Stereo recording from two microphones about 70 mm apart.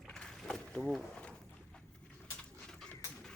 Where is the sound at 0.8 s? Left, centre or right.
Centre.